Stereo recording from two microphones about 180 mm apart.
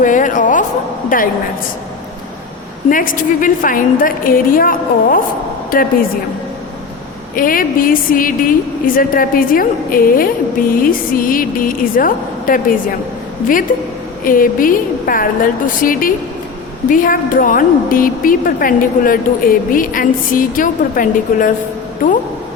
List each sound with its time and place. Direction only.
0.0 s a woman's voice: 45° left (ahead or behind)
2.9 s a woman's voice: 50° left (ahead or behind)
7.3 s a woman's voice: 50° left (ahead or behind)